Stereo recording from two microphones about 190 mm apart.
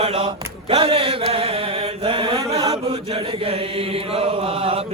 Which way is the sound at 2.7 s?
30° right (ahead or behind).